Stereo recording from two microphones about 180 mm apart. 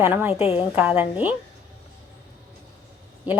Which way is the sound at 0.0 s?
10° right (ahead or behind).